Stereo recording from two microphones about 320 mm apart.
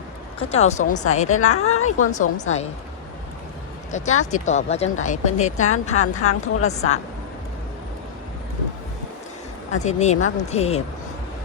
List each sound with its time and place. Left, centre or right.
0.3 s a woman's voice: centre
1.4 s a woman's voice: left
2.4 s a woman's voice: left
3.9 s a woman's voice: left
9.7 s a woman's voice: left